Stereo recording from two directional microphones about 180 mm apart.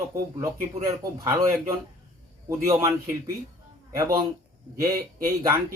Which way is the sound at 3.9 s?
20° right (ahead or behind).